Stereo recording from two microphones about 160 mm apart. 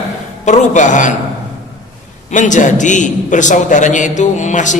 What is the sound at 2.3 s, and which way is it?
A man's voice, 50° left (ahead or behind).